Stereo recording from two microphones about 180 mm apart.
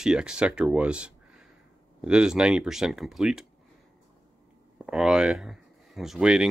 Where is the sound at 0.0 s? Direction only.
5° right (ahead or behind).